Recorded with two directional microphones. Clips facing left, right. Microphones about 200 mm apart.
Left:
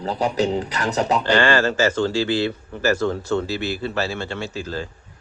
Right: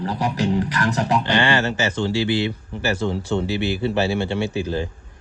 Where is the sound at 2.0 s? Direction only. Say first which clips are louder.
Even; 15° right (ahead or behind).